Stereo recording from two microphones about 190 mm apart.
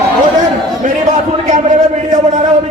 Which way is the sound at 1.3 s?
40° right (ahead or behind).